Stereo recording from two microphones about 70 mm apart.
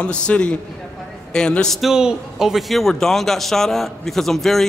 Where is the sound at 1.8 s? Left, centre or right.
Centre.